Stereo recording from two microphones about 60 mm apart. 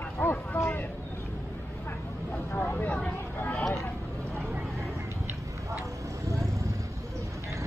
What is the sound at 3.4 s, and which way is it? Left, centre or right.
Vehicle, left.